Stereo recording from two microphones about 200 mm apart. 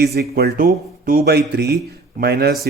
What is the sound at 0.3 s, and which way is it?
Speech, 50° right (ahead or behind).